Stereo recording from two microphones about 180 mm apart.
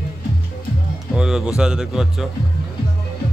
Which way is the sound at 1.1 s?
5° right (ahead or behind).